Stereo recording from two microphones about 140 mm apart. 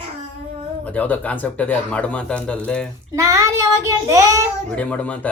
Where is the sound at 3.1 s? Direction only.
25° right (ahead or behind).